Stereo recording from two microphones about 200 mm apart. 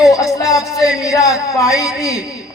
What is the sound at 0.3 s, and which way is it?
Music, 15° left (ahead or behind).